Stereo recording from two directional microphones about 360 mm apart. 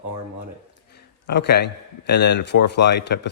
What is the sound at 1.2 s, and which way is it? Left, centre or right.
Speech, left.